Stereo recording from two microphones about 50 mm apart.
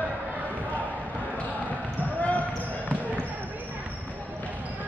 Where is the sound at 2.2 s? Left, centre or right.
Left.